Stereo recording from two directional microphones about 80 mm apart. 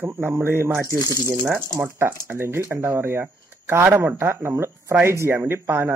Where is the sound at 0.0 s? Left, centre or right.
Right.